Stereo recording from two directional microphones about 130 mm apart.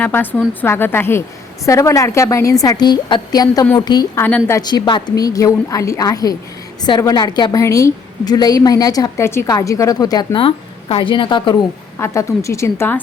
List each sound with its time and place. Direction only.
0.0 s a woman's voice: 15° left (ahead or behind); by 4.2 s 30° left (ahead or behind)
4.2 s a woman's voice: 10° left (ahead or behind)
4.4 s a woman's voice: 30° left (ahead or behind)
10.4 s speech: 45° left (ahead or behind)
11.9 s a woman's voice: 20° left (ahead or behind)